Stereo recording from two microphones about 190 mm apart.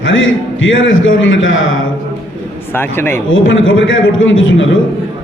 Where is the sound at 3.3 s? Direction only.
85° left.